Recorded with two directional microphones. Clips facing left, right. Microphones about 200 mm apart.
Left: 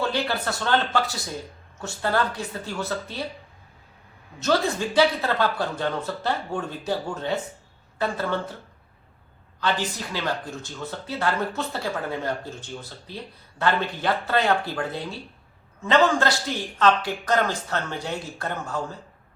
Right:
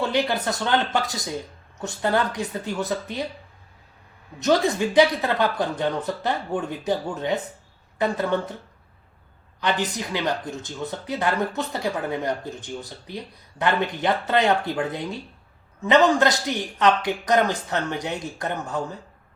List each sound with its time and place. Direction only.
0.0 s speech: 15° right (ahead or behind)
4.4 s speech: 15° right (ahead or behind)
9.6 s speech: 20° right (ahead or behind)